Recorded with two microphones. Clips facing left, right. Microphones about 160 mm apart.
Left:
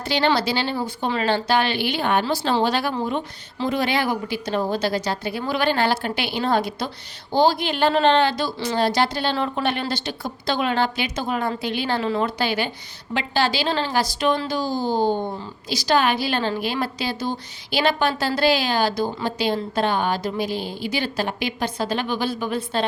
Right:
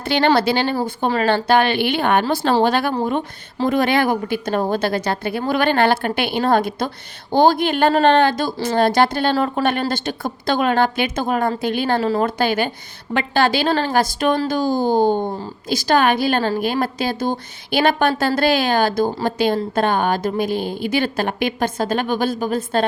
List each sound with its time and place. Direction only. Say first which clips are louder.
0.0 s a woman's voice: right 4 dB; 55° right (ahead or behind)